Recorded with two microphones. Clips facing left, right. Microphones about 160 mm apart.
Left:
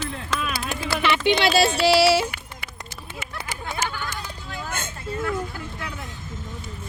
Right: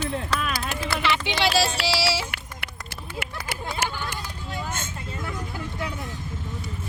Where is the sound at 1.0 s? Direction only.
60° left (ahead or behind).